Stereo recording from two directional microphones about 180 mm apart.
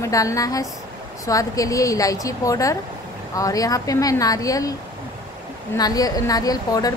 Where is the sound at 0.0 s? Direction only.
20° left (ahead or behind).